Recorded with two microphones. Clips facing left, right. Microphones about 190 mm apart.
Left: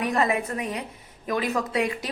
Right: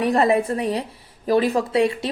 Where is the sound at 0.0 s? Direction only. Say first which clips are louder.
Right 6 dB; 35° right (ahead or behind).